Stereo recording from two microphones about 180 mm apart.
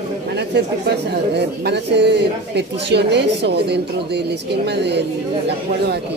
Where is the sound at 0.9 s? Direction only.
65° right (ahead or behind).